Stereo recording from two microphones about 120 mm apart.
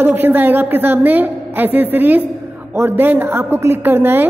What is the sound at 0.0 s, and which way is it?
A woman's voice, 15° right (ahead or behind).